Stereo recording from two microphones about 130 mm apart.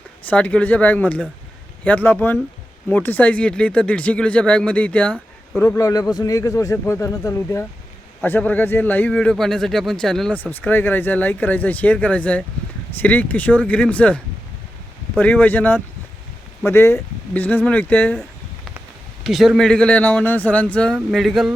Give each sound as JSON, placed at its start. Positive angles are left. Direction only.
{"t": 0.3, "sound": "speech", "side_deg": 10}
{"t": 5.5, "sound": "speech", "side_deg": 25}
{"t": 15.2, "sound": "speech", "side_deg": 15}
{"t": 19.2, "sound": "speech", "side_deg": 0}